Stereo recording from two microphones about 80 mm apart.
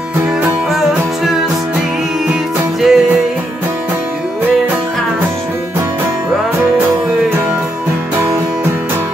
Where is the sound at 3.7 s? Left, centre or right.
Right.